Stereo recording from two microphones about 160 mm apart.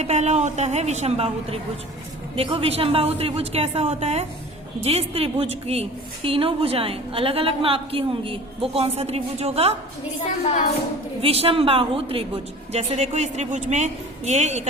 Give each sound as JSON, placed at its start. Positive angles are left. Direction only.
{"t": 0.0, "sound": "a woman's voice", "side_deg": -45}
{"t": 11.2, "sound": "a woman's voice", "side_deg": -40}